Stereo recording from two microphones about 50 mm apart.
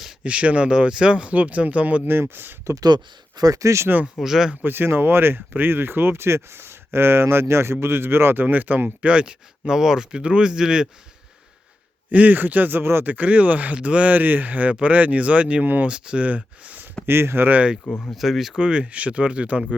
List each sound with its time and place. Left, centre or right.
0.2 s speech: right
2.0 s speech: right
3.6 s speech: right
4.2 s speech: centre
4.6 s speech: right
9.0 s speech: right
12.1 s speech: right
13.1 s speech: right
15.6 s speech: right
15.9 s speech: right
17.1 s speech: right
18.1 s speech: centre
18.6 s speech: right